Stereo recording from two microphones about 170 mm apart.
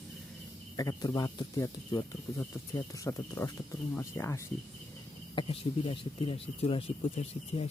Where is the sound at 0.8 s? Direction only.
20° left (ahead or behind).